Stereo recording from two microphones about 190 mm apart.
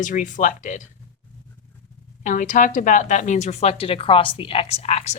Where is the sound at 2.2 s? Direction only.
40° left (ahead or behind).